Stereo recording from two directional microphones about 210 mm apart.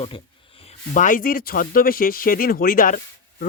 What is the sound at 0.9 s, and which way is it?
Speech, 40° left (ahead or behind).